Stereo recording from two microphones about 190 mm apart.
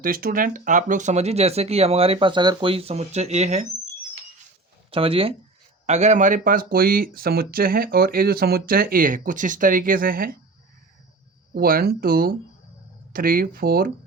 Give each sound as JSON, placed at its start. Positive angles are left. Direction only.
{"t": 0.0, "sound": "speech", "side_deg": -50}
{"t": 4.9, "sound": "speech", "side_deg": -30}
{"t": 11.5, "sound": "speech", "side_deg": -50}